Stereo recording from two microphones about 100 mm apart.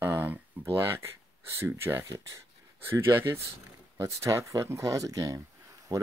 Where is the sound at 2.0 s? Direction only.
35° right (ahead or behind).